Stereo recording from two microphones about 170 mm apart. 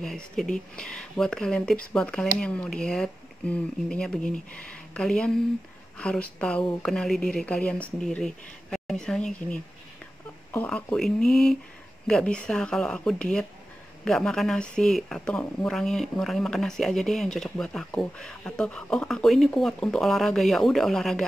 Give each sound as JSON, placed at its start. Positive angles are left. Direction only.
{"t": 0.0, "sound": "a woman's voice", "side_deg": 0}